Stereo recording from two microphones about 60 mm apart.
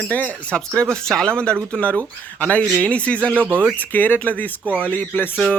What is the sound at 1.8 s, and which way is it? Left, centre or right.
Speech, left.